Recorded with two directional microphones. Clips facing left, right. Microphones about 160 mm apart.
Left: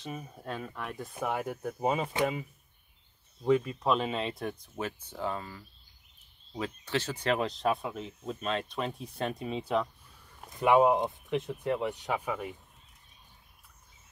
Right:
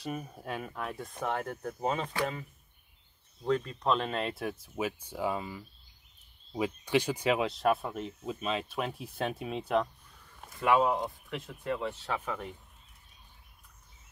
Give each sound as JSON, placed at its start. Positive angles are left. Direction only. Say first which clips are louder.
{"t": 0.0, "sound": "speech", "louder": "right 2 dB", "side_deg": -5}
{"t": 3.4, "sound": "speech", "louder": "left 3 dB", "side_deg": 5}
{"t": 10.5, "sound": "speech", "louder": "left 3 dB", "side_deg": 20}